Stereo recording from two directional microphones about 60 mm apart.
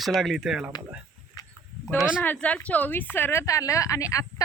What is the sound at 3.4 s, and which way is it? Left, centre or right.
Speech, left.